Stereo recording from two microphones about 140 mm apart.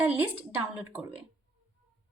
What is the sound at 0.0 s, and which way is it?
Speech, 15° right (ahead or behind).